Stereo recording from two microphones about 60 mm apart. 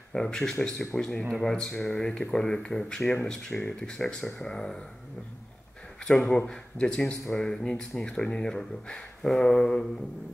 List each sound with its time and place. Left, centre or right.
0.1 s speech: centre
6.0 s speech: centre